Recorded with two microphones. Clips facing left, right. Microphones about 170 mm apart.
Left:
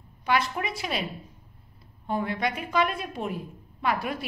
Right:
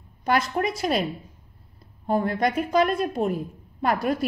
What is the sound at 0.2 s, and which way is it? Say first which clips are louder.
Speech: right 4 dB; 45° right (ahead or behind).